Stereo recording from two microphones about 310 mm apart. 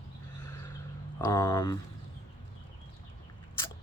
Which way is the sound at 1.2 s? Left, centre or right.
Centre.